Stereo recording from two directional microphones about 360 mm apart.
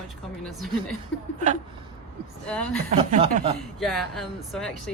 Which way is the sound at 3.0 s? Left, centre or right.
Centre.